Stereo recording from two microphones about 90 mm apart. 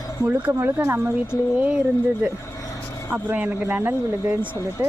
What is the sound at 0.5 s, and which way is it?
Speech, 30° right (ahead or behind).